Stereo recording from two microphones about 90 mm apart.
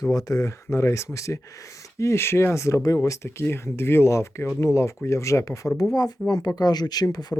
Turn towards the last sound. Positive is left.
turn(degrees=45)  # may be behind; listen again after turning